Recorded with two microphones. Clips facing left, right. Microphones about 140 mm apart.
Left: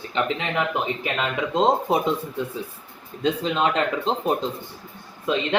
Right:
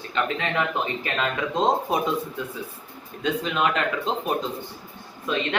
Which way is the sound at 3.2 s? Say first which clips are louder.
Left 2 dB; 30° left (ahead or behind).